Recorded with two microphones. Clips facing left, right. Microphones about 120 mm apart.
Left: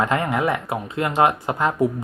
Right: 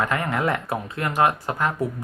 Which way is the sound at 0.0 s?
20° left (ahead or behind).